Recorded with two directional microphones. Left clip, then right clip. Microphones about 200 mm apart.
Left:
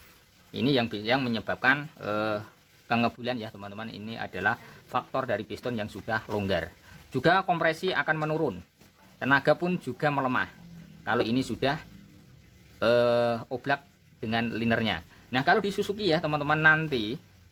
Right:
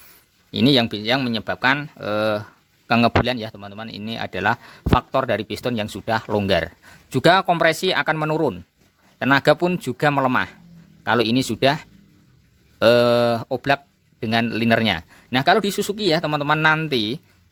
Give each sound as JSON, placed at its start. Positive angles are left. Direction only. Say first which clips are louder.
{"t": 0.5, "sound": "speech", "louder": "right 9 dB", "side_deg": -55}